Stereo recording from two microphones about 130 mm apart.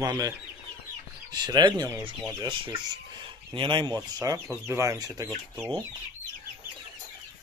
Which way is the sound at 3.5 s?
40° right (ahead or behind).